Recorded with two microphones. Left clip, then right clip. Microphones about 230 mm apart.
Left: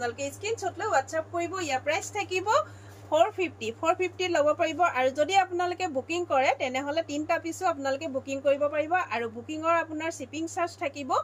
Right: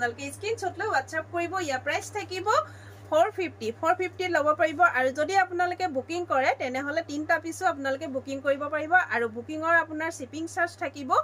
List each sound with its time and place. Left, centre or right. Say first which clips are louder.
0.4 s a woman's voice: right 3 dB; centre